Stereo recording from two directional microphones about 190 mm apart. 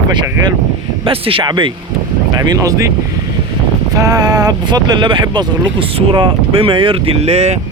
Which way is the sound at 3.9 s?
20° right (ahead or behind).